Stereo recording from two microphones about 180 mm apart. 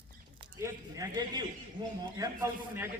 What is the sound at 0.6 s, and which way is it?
A man's voice, 20° right (ahead or behind).